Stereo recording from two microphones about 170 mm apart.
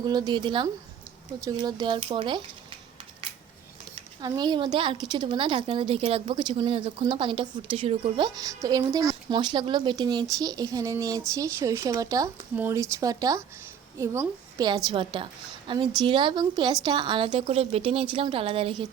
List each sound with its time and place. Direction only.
0.0 s a woman's voice: 25° right (ahead or behind)
4.2 s a woman's voice: 25° right (ahead or behind)
14.8 s a woman's voice: 30° right (ahead or behind)